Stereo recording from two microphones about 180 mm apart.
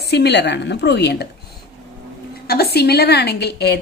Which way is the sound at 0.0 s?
65° left (ahead or behind).